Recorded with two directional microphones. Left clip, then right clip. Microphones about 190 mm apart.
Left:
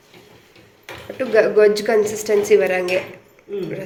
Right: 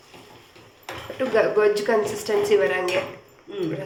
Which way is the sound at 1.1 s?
25° left (ahead or behind).